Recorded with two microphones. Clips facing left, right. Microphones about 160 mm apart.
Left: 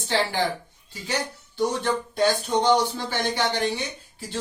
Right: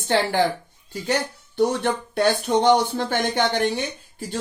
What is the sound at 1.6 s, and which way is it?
Speech, 60° right (ahead or behind).